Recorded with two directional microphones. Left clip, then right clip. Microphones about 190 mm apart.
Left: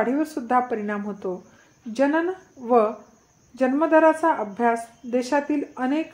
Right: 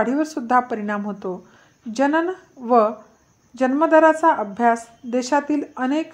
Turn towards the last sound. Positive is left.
turn(degrees=-35)  # may be behind; listen again after turning